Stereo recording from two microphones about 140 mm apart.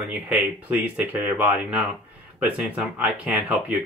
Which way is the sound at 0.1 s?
10° right (ahead or behind).